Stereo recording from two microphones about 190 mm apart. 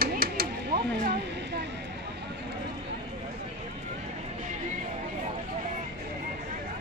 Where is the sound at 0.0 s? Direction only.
55° right (ahead or behind).